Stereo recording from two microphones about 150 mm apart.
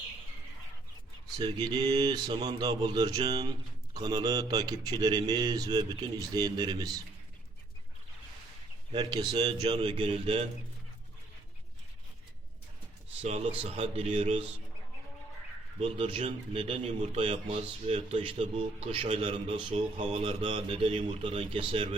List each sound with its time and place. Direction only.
1.4 s speech: 30° right (ahead or behind)
8.9 s a man's voice: 30° right (ahead or behind)
13.2 s speech: 45° right (ahead or behind)
15.8 s a man's voice: 40° right (ahead or behind)